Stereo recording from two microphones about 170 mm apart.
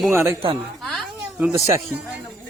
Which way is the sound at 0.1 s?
15° right (ahead or behind).